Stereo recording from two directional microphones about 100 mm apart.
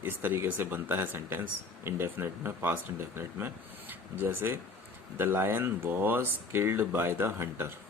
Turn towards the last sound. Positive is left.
turn(degrees=-25)  # may be behind; listen again after turning